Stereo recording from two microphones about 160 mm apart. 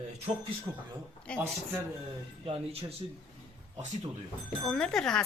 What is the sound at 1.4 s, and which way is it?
Speech, 15° right (ahead or behind).